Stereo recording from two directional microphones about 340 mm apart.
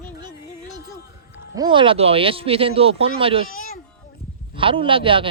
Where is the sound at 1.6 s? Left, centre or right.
Centre.